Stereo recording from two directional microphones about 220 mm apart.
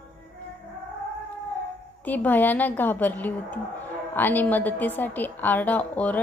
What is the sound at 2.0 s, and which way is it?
A woman's voice, 10° left (ahead or behind).